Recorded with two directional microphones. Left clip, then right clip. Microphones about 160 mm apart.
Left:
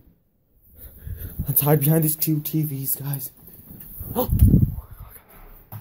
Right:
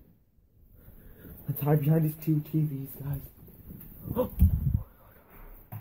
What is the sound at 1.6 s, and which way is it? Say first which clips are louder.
Speech: left 7 dB; 65° left (ahead or behind).